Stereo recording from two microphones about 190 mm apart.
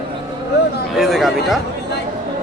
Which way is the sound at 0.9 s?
Centre (ahead or behind).